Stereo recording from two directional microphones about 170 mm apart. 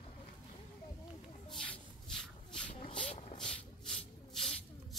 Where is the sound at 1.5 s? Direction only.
5° left (ahead or behind).